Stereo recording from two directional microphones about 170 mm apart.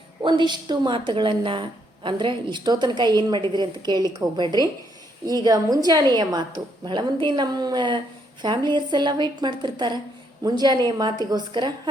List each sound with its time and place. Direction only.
0.2 s a woman's voice: 25° right (ahead or behind)